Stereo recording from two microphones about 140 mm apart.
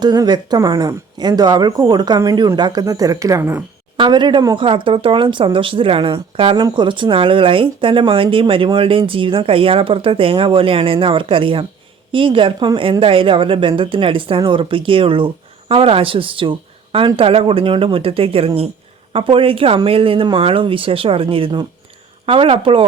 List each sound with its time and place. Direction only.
0.0 s speech: 30° right (ahead or behind)
3.9 s speech: 35° right (ahead or behind)